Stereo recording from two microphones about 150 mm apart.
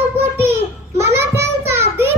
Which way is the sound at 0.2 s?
15° right (ahead or behind).